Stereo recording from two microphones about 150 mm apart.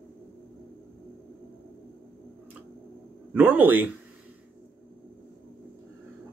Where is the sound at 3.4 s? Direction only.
10° right (ahead or behind).